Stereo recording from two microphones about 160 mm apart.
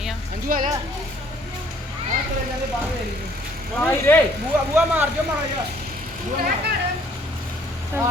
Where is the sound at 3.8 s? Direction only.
10° left (ahead or behind).